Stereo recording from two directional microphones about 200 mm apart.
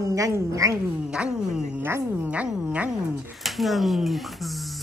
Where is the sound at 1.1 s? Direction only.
5° right (ahead or behind).